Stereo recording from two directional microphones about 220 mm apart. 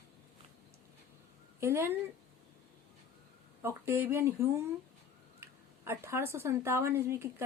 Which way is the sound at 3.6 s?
10° right (ahead or behind).